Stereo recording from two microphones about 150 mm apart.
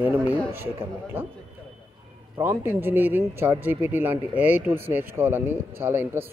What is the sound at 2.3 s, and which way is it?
Speech, 15° right (ahead or behind).